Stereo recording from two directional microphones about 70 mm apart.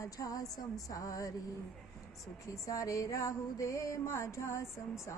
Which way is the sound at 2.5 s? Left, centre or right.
Left.